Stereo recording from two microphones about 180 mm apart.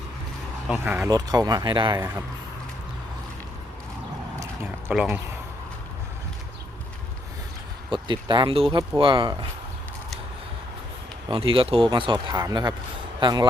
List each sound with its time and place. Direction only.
0.9 s speech: 10° right (ahead or behind)
1.1 s speech: 20° right (ahead or behind)
4.9 s speech: 5° right (ahead or behind)
7.9 s speech: 25° right (ahead or behind)
11.3 s speech: 30° right (ahead or behind)